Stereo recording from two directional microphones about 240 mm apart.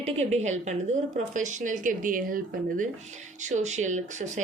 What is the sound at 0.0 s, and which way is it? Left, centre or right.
Speech, right.